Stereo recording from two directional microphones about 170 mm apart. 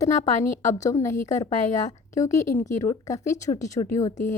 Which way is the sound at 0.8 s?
20° left (ahead or behind).